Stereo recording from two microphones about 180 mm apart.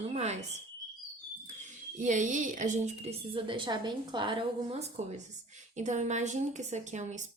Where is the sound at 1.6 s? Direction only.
45° right (ahead or behind); by 4.4 s 25° right (ahead or behind).